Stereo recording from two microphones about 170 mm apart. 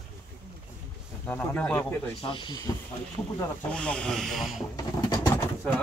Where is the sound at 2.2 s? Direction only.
30° left (ahead or behind).